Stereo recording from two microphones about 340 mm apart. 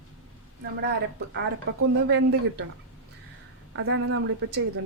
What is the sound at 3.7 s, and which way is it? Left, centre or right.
Speech, right.